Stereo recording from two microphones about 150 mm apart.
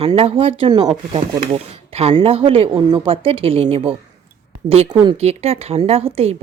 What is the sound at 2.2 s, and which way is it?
A woman's voice, 40° right (ahead or behind).